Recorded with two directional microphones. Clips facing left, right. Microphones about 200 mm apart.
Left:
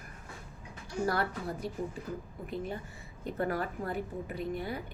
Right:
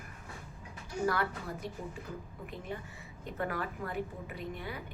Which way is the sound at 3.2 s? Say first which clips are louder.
Left 4 dB; 35° left (ahead or behind).